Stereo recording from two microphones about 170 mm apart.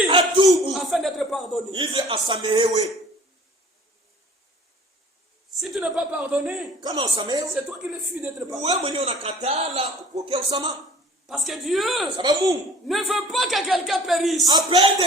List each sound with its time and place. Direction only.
0.1 s a sound: 30° right (ahead or behind)
0.7 s a sound: centre (ahead or behind)
1.7 s a man's voice: 30° right (ahead or behind)
5.5 s speech: centre (ahead or behind)
6.8 s a man's voice: 25° right (ahead or behind)
7.5 s speech: 5° right (ahead or behind)
8.6 s a man's voice: 35° right (ahead or behind)
11.3 s speech: centre (ahead or behind)
12.1 s a man's voice: 20° right (ahead or behind)
12.9 s speech: centre (ahead or behind)
14.4 s a man's voice: 30° right (ahead or behind)